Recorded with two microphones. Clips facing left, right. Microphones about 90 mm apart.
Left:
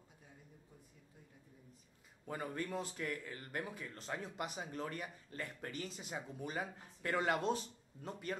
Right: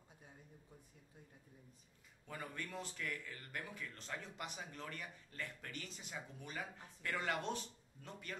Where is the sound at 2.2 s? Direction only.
35° left (ahead or behind).